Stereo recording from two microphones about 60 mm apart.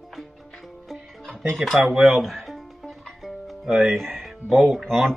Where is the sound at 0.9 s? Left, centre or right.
Centre.